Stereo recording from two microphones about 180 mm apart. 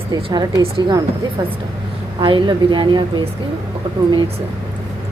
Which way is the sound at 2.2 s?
25° right (ahead or behind).